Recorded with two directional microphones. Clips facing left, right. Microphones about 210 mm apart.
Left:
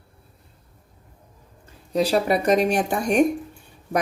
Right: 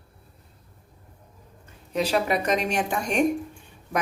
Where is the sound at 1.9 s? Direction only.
35° left (ahead or behind).